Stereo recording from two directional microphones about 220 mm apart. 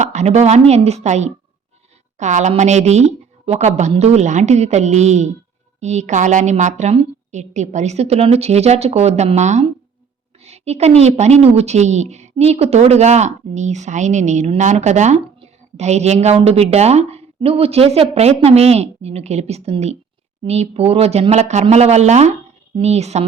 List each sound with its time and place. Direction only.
0.0 s a woman's voice: 30° right (ahead or behind)